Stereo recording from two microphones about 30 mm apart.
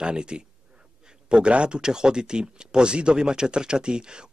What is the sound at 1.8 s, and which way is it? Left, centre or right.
Speech, right.